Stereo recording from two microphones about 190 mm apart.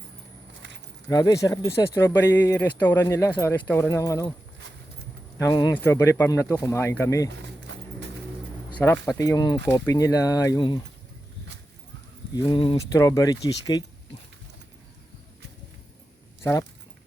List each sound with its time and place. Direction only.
1.0 s speech: 20° left (ahead or behind)
5.4 s speech: 20° left (ahead or behind)
8.8 s speech: 10° left (ahead or behind)
12.3 s speech: 25° left (ahead or behind)
16.4 s speech: 15° left (ahead or behind)